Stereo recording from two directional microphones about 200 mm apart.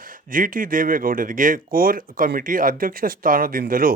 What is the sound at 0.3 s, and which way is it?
A man's voice, 45° right (ahead or behind).